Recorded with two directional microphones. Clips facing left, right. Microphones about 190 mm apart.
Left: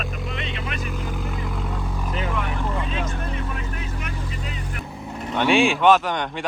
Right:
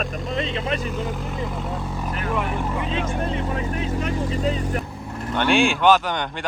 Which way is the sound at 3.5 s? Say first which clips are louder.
Right 6 dB; 30° right (ahead or behind).